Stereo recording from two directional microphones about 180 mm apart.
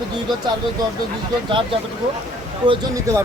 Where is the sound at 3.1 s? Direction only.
15° right (ahead or behind).